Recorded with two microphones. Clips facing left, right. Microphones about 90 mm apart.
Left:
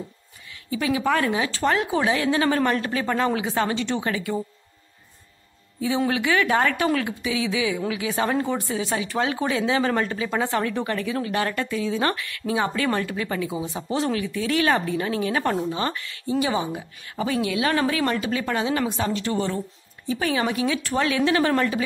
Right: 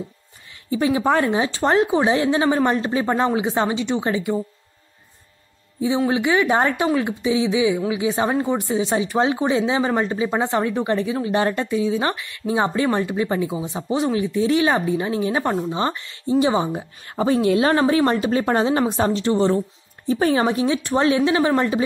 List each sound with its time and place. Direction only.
0.7 s speech: 30° right (ahead or behind)
6.0 s speech: 20° right (ahead or behind)
21.2 s speech: 15° right (ahead or behind)